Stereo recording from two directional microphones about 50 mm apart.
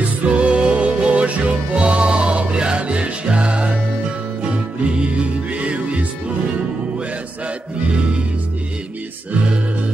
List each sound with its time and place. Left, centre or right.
0.2 s music: right